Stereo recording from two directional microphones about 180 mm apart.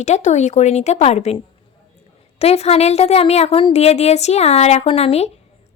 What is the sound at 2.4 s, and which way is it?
A woman's voice, 35° left (ahead or behind).